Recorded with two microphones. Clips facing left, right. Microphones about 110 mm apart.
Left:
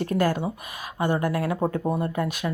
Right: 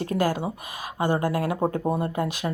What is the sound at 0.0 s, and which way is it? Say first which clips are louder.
Speech: left 1 dB; 15° right (ahead or behind).